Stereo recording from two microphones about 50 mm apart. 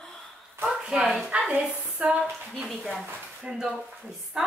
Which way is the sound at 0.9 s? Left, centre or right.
Centre.